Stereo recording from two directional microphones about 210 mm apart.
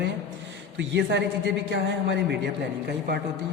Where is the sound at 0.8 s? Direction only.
60° right (ahead or behind).